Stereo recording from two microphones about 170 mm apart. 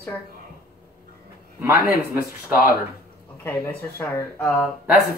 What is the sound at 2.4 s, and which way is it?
Speech, 10° right (ahead or behind).